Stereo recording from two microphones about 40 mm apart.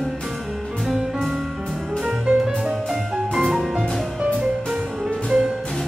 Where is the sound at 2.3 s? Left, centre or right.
Right.